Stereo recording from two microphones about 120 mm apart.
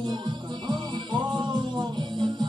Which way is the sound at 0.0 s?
40° right (ahead or behind).